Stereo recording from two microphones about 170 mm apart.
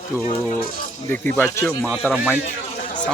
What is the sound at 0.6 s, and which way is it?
Speech, 55° left (ahead or behind).